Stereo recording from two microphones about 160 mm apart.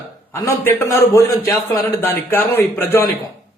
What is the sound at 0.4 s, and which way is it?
A man's voice, 15° left (ahead or behind).